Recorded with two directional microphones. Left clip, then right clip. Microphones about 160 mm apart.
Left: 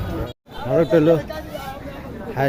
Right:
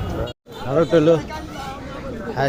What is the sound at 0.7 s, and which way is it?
Chatter, 25° left (ahead or behind).